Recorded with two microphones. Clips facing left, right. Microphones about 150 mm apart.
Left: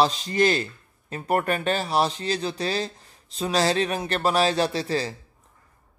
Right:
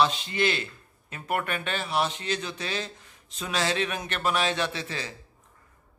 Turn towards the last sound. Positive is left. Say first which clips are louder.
# left 8 dB
turn(degrees=35)  # may be behind; listen again after turning